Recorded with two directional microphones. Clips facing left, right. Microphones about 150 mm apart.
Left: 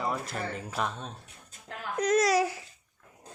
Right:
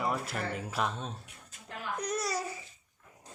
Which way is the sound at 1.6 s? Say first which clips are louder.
Left 7 dB; 90° left.